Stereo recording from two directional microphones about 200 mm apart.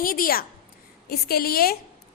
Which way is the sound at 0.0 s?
45° left (ahead or behind).